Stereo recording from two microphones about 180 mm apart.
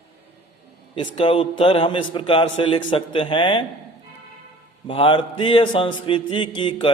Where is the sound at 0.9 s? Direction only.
30° left (ahead or behind).